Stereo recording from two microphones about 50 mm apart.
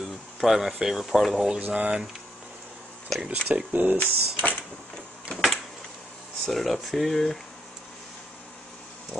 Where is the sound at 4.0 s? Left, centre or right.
Left.